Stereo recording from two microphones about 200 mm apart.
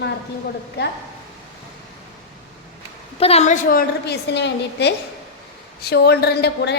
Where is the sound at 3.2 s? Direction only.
30° left (ahead or behind).